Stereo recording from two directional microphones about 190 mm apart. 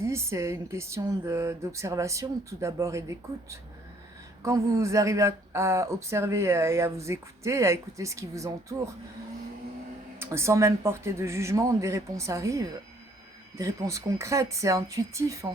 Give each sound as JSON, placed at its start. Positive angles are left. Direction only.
{"t": 0.0, "sound": "speech", "side_deg": -15}
{"t": 10.2, "sound": "speech", "side_deg": -15}